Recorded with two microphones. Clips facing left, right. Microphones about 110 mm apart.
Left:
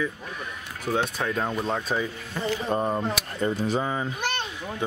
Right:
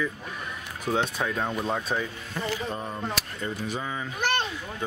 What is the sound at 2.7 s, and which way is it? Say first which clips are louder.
Speech: left 8 dB; 45° left (ahead or behind).